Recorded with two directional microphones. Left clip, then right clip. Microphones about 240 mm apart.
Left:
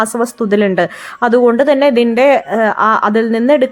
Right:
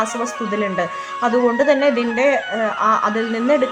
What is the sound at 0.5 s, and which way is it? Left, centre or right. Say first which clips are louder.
A man's voice: left 9 dB; left.